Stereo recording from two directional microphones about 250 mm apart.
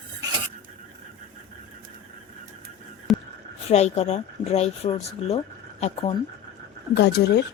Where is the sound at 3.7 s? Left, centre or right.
Left.